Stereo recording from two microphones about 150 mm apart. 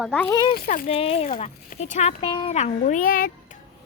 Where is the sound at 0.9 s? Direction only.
40° left (ahead or behind).